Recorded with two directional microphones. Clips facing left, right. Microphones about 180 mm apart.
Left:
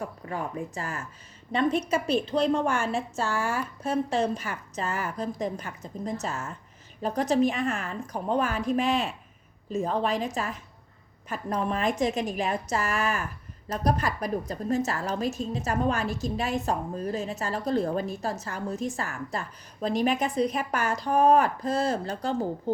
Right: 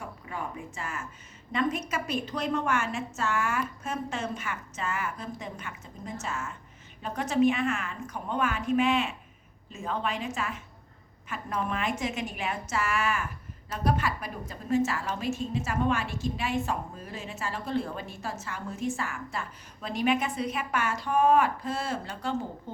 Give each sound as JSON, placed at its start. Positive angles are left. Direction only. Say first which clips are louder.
{"t": 0.3, "sound": "a woman's voice", "louder": "left 4 dB", "side_deg": 40}